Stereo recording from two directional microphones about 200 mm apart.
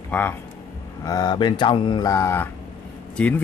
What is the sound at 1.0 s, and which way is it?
Speech, 20° left (ahead or behind).